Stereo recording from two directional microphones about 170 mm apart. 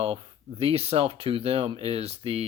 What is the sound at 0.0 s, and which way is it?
Speech, 35° right (ahead or behind).